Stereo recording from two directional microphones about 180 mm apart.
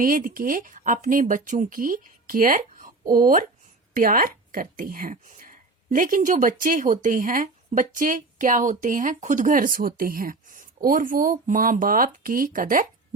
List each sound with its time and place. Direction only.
0.0 s a woman's voice: 50° right (ahead or behind)